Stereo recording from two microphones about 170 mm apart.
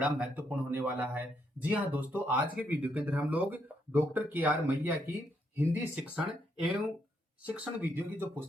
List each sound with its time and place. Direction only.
0.0 s speech: 10° right (ahead or behind)
7.5 s speech: 10° right (ahead or behind)